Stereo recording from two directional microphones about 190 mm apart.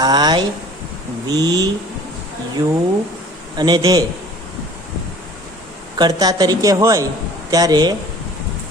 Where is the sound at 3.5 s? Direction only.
20° right (ahead or behind).